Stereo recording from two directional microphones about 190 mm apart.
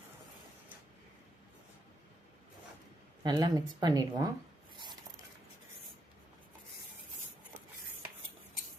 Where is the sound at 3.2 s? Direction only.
20° right (ahead or behind).